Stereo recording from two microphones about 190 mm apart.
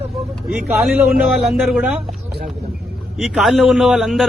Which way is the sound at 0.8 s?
10° right (ahead or behind).